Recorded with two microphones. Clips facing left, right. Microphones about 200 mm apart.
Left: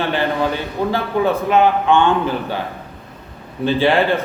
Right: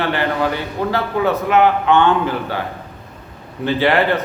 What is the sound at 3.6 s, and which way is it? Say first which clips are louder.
Speech: left 1 dB; 15° left (ahead or behind).